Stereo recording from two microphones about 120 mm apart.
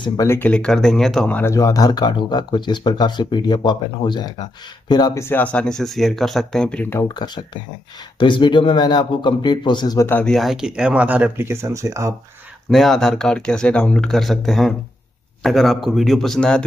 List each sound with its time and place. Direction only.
0.2 s speech: 20° left (ahead or behind)
0.5 s speech: 5° left (ahead or behind)
1.4 s speech: 25° left (ahead or behind)
5.2 s speech: 15° left (ahead or behind)
7.1 s speech: 40° left (ahead or behind)
9.9 s speech: 15° left (ahead or behind)
10.2 s speech: centre (ahead or behind); by 12.1 s 25° right (ahead or behind)
12.6 s speech: centre (ahead or behind)